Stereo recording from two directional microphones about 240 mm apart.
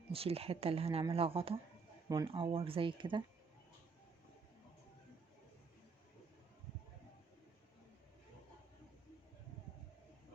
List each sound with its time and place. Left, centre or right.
0.1 s speech: right